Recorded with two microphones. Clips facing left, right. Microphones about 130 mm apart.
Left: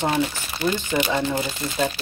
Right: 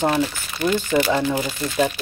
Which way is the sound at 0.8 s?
20° left (ahead or behind).